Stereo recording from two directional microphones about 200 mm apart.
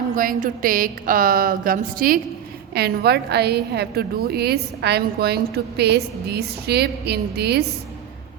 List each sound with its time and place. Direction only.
0.2 s a woman's voice: 40° right (ahead or behind)